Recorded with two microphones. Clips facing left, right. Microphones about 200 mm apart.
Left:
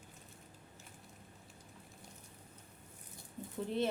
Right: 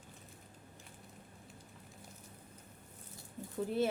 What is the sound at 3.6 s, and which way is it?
Speech, 5° right (ahead or behind).